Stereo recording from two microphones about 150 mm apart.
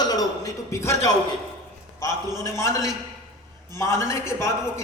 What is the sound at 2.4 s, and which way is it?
A man's voice, 20° left (ahead or behind).